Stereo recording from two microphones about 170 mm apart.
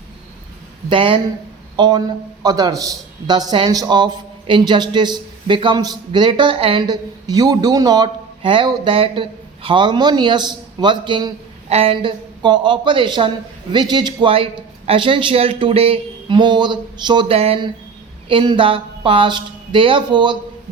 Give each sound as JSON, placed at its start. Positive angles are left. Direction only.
{"t": 0.9, "sound": "a man's voice", "side_deg": -30}